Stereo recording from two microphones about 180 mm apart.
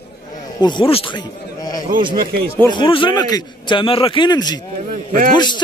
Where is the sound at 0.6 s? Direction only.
25° left (ahead or behind).